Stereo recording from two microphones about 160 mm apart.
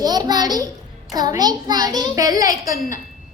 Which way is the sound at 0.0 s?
25° right (ahead or behind).